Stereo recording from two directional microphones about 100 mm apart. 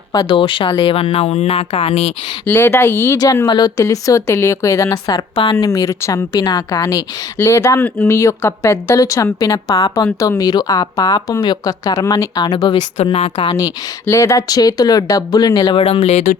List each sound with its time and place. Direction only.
0.1 s speech: 50° left (ahead or behind); by 2.1 s 85° left
2.5 s speech: 25° left (ahead or behind)
3.4 s speech: 45° left (ahead or behind)
7.3 s speech: 25° left (ahead or behind); by 12.8 s 45° left (ahead or behind)
13.1 s a woman's voice: 60° left (ahead or behind)
14.1 s speech: 30° left (ahead or behind); by 16.1 s 85° left